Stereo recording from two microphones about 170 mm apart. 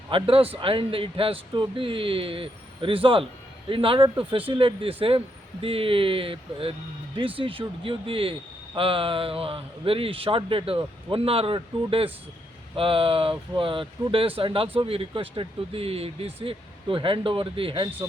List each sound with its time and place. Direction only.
0.1 s speech: 30° right (ahead or behind)